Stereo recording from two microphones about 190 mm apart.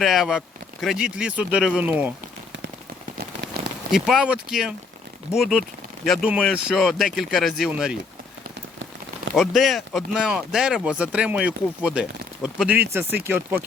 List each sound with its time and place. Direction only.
0.0 s speech: centre (ahead or behind)
3.6 s rain on surface: 55° right (ahead or behind)
3.9 s speech: centre (ahead or behind)
9.3 s speech: centre (ahead or behind)